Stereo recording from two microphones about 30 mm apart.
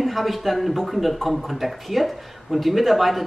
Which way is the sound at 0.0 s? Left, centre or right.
Centre.